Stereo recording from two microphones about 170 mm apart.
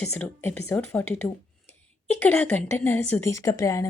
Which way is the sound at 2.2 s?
10° left (ahead or behind).